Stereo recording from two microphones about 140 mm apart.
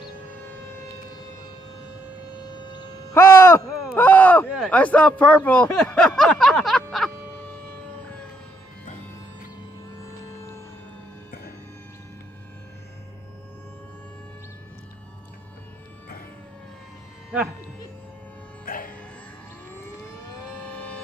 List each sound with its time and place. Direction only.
2.4 s siren: 30° left (ahead or behind)
3.2 s a sound: 15° left (ahead or behind); by 7.1 s centre (ahead or behind)
8.8 s music: 60° left (ahead or behind)
18.7 s music: 90° left